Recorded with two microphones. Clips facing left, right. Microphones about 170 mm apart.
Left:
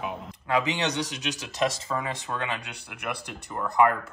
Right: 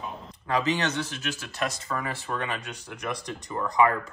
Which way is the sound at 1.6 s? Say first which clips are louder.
Left 4 dB; 20° left (ahead or behind).